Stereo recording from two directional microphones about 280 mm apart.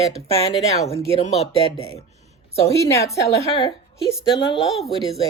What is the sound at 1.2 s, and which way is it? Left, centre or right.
Speech, left.